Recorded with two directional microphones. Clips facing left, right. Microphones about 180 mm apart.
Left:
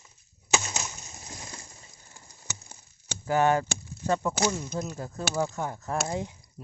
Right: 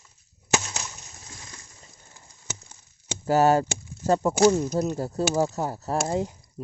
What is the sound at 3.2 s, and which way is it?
Speech, 35° right (ahead or behind).